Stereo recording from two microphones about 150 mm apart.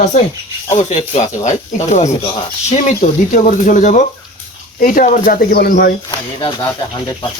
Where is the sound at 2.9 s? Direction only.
60° left (ahead or behind); by 5.9 s 85° left.